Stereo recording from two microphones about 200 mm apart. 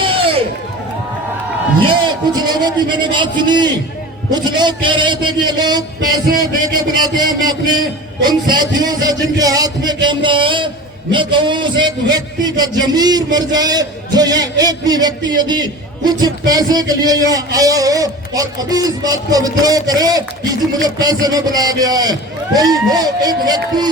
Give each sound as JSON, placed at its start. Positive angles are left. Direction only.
{"t": 0.0, "sound": "a sound", "side_deg": -25}
{"t": 1.9, "sound": "a man's voice", "side_deg": -25}
{"t": 6.9, "sound": "a man's voice", "side_deg": -20}